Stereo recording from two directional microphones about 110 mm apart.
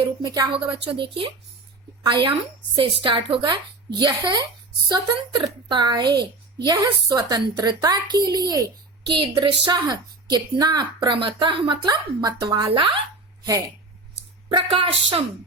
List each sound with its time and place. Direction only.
0.2 s a woman's voice: 35° right (ahead or behind)
0.5 s a woman's voice: 50° right (ahead or behind); by 8.6 s 35° right (ahead or behind)
9.0 s a woman's voice: 50° right (ahead or behind)
12.6 s a woman's voice: 50° right (ahead or behind)
14.5 s a woman's voice: 55° right (ahead or behind)